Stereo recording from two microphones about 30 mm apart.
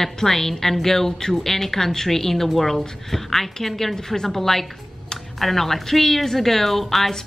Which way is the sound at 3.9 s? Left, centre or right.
Left.